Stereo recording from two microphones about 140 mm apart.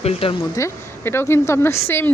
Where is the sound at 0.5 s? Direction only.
20° left (ahead or behind).